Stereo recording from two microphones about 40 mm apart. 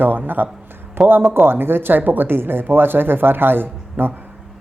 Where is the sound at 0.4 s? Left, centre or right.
Right.